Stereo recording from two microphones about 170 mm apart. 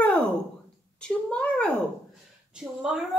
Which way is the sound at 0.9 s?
5° left (ahead or behind).